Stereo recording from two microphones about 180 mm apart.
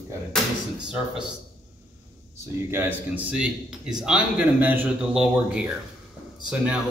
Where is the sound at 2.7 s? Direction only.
10° right (ahead or behind).